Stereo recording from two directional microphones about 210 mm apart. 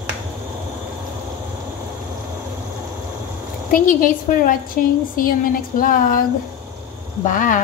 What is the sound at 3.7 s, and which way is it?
Speech, 40° left (ahead or behind).